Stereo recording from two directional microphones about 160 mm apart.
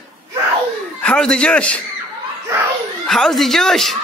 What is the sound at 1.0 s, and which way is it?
Speech, 5° left (ahead or behind).